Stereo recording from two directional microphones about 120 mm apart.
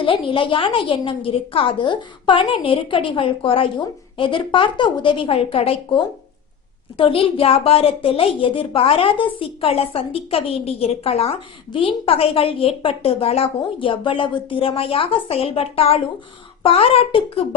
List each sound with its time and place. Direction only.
0.0 s a woman's voice: 45° left (ahead or behind)